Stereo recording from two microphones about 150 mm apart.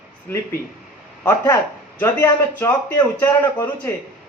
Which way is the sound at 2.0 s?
15° left (ahead or behind).